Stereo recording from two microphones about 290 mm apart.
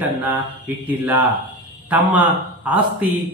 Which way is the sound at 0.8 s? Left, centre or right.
Centre.